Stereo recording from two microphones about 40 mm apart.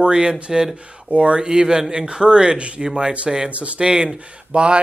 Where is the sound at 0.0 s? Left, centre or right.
Right.